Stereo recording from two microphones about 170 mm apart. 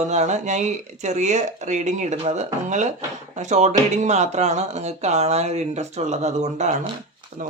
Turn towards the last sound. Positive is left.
turn(degrees=-40)  # may be behind; listen again after turning